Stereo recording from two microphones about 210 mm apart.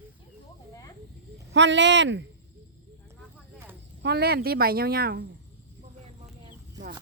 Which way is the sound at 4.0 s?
50° right (ahead or behind).